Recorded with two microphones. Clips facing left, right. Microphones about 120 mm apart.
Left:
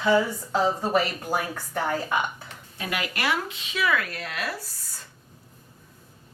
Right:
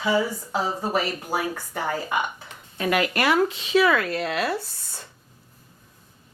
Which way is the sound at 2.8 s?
50° right (ahead or behind).